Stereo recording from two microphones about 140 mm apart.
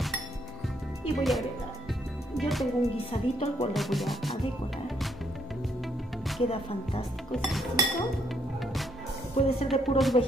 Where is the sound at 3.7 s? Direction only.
Centre (ahead or behind).